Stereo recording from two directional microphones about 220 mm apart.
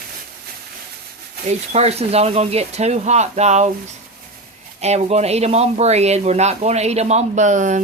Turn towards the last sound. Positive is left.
turn(degrees=-35)  # may be behind; listen again after turning